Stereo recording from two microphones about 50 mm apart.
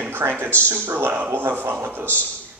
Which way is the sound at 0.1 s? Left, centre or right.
Right.